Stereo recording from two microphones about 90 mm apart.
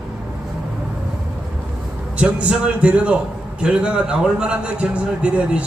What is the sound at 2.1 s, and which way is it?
A man's voice, 15° right (ahead or behind).